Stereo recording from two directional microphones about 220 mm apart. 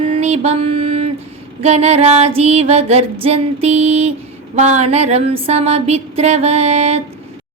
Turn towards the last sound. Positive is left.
turn(degrees=-30)  # may be behind; listen again after turning